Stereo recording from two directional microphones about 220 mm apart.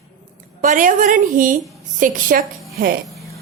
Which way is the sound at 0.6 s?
35° right (ahead or behind).